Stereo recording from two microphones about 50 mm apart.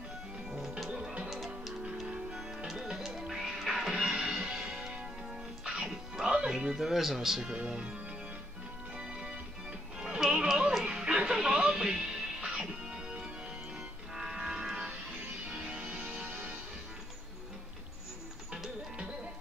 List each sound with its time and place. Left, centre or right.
0.5 s music: centre
2.0 s music: centre
7.5 s speech: right
8.9 s music: centre
15.5 s music: right
16.3 s music: right